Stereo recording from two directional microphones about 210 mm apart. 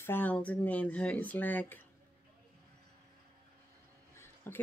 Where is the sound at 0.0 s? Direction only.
10° left (ahead or behind).